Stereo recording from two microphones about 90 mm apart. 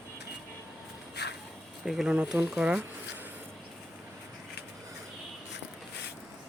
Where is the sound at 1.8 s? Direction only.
5° right (ahead or behind).